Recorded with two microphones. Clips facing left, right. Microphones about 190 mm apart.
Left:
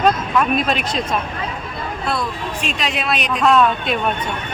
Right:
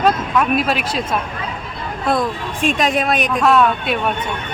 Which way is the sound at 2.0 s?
50° right (ahead or behind).